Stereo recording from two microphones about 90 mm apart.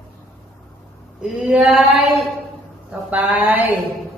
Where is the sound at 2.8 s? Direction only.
20° right (ahead or behind).